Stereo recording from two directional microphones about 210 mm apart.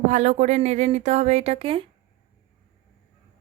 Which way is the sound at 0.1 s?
35° right (ahead or behind).